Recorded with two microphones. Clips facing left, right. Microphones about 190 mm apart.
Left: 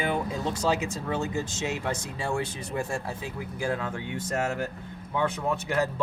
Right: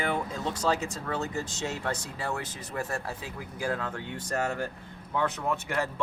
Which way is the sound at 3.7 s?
10° left (ahead or behind).